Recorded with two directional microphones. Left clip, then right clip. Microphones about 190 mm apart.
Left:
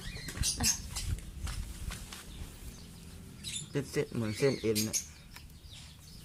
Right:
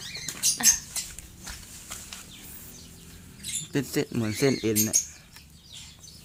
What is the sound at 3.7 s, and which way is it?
Speech, 45° right (ahead or behind).